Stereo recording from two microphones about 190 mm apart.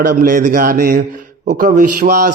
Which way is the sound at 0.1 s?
45° right (ahead or behind).